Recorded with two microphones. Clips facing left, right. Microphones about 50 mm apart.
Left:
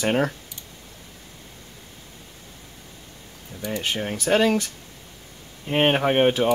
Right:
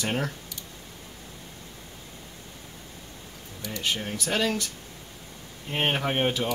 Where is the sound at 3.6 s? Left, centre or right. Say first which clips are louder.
Left 4 dB; left.